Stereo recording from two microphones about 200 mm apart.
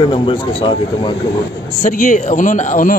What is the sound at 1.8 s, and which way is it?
Speech, 40° left (ahead or behind).